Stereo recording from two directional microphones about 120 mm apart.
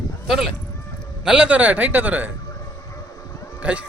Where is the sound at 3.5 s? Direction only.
10° right (ahead or behind).